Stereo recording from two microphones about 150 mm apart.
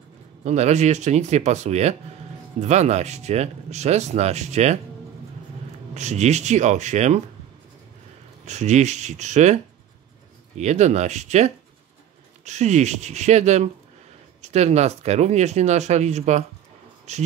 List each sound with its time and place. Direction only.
0.4 s speech: 50° right (ahead or behind)
5.9 s speech: 50° right (ahead or behind)
8.5 s speech: 50° right (ahead or behind)
10.6 s speech: 50° right (ahead or behind)